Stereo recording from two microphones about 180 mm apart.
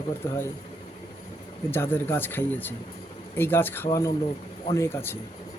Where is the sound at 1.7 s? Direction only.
10° left (ahead or behind).